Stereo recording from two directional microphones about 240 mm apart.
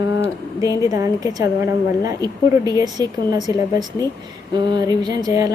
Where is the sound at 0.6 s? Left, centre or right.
Centre.